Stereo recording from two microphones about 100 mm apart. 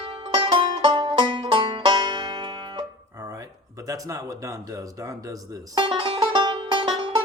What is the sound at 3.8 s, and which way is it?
Speech, 35° right (ahead or behind).